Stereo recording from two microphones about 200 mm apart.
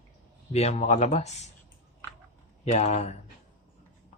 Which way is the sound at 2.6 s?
30° left (ahead or behind).